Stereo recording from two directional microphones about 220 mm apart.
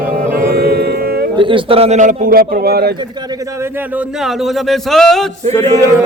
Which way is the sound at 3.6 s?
5° right (ahead or behind).